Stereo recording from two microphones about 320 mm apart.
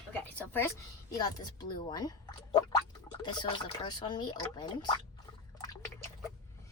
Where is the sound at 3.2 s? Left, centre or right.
Centre.